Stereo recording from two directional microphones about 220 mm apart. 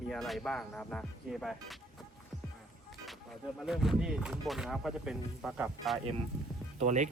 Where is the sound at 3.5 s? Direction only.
Centre (ahead or behind).